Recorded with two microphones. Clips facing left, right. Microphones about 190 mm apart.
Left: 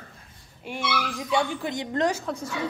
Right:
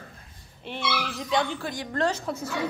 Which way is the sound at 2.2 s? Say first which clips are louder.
Even; 5° right (ahead or behind).